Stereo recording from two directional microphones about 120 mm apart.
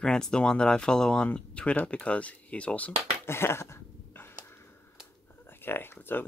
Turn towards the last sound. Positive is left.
turn(degrees=15)  # may be behind; listen again after turning